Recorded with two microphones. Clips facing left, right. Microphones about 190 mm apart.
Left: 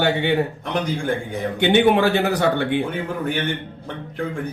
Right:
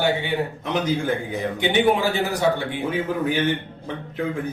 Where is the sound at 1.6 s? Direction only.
70° left (ahead or behind).